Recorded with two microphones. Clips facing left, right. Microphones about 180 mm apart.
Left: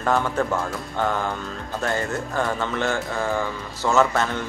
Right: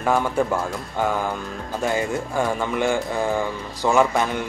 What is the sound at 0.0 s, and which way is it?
Speech, 10° right (ahead or behind).